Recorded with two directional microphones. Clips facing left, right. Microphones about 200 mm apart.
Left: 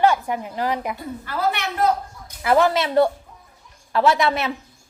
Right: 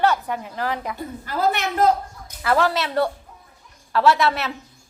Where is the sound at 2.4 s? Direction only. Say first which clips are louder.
Left 3 dB; 15° left (ahead or behind).